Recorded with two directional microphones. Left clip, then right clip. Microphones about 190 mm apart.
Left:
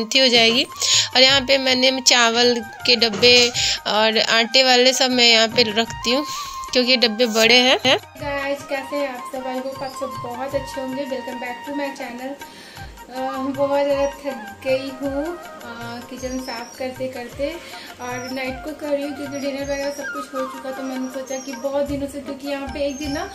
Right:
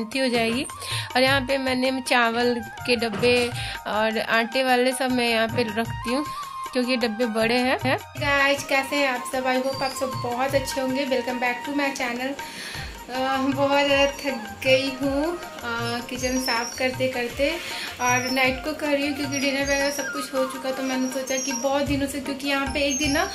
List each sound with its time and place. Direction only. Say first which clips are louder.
0.1 s speech: left 9 dB; 20° left (ahead or behind)
8.2 s speech: right 4 dB; centre (ahead or behind)
13.2 s speech: even; centre (ahead or behind)
16.3 s speech: right 4 dB; 5° right (ahead or behind)
18.0 s speech: right 6 dB; centre (ahead or behind)
22.5 s speech: right 1 dB; centre (ahead or behind)